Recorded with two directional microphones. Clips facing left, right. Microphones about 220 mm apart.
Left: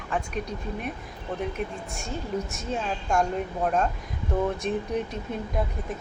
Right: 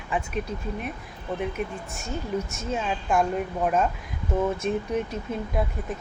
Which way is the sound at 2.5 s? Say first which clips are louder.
Right 1 dB; centre (ahead or behind).